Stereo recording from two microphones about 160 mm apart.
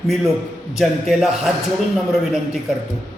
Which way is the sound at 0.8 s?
5° right (ahead or behind).